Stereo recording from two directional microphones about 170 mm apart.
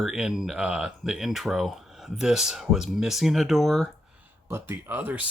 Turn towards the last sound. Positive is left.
turn(degrees=-10)  # may be behind; listen again after turning